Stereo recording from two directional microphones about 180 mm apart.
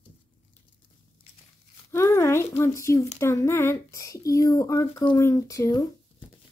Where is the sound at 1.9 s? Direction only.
15° left (ahead or behind).